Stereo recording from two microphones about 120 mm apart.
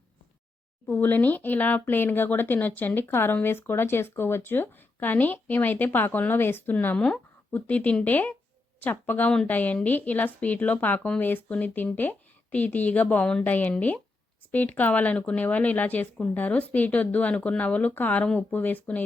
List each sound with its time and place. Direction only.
0.9 s speech: 15° left (ahead or behind)